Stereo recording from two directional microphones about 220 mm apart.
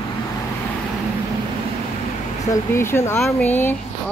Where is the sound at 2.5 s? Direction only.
10° left (ahead or behind).